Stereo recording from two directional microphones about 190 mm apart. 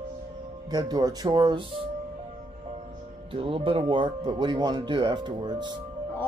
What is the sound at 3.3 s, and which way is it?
Speech, 30° right (ahead or behind).